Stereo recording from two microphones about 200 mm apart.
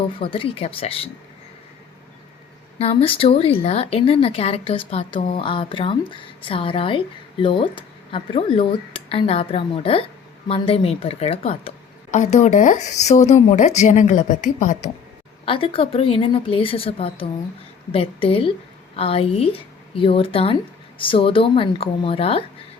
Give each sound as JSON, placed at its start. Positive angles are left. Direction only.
{"t": 0.2, "sound": "a woman's voice", "side_deg": 25}
{"t": 2.7, "sound": "a woman's voice", "side_deg": 30}
{"t": 15.4, "sound": "a woman's voice", "side_deg": 25}